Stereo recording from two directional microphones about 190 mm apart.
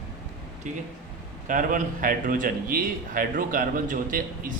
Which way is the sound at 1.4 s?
45° right (ahead or behind).